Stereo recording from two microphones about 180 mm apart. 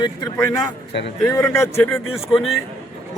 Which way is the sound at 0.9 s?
75° left (ahead or behind).